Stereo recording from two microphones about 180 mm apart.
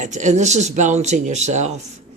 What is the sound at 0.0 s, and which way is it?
Speech, 40° right (ahead or behind).